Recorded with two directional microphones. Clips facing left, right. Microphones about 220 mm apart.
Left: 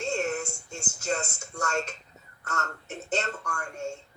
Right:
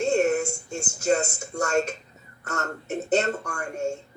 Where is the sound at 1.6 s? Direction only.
50° right (ahead or behind).